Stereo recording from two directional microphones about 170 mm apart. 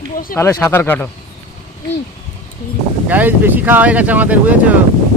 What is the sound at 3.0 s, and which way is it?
Speech, 10° right (ahead or behind).